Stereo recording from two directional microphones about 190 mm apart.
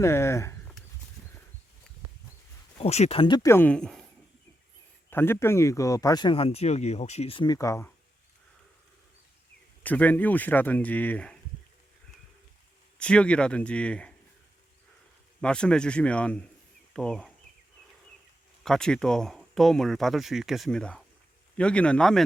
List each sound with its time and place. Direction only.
0.0 s speech: 15° left (ahead or behind)
2.7 s speech: 35° left (ahead or behind); by 4.1 s centre (ahead or behind)
5.1 s speech: 10° left (ahead or behind)
9.8 s speech: 10° left (ahead or behind)
13.0 s speech: 5° left (ahead or behind)
15.4 s speech: 5° left (ahead or behind)
18.6 s speech: 5° left (ahead or behind)